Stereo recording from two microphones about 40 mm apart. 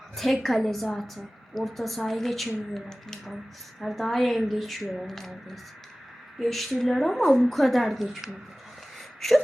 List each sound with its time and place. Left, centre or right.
0.4 s a woman's voice: centre